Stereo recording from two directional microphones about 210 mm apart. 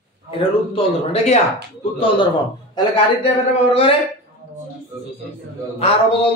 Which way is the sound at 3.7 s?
25° left (ahead or behind).